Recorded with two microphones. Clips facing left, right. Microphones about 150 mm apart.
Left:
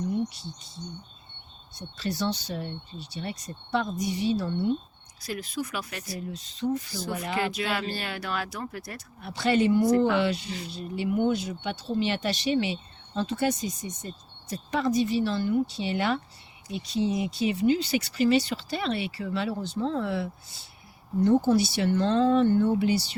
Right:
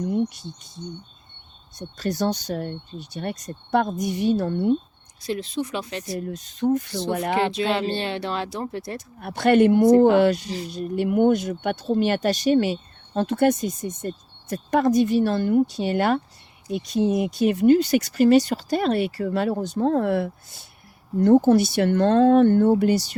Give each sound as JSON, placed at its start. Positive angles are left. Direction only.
{"t": 2.0, "sound": "speech", "side_deg": -45}
{"t": 5.2, "sound": "speech", "side_deg": -25}
{"t": 6.1, "sound": "speech", "side_deg": -55}
{"t": 7.3, "sound": "speech", "side_deg": -30}
{"t": 9.2, "sound": "speech", "side_deg": -55}
{"t": 21.3, "sound": "speech", "side_deg": -50}